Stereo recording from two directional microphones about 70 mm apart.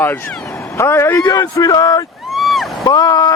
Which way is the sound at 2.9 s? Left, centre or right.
Left.